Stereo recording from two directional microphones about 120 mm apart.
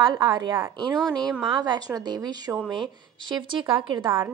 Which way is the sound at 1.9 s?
35° right (ahead or behind).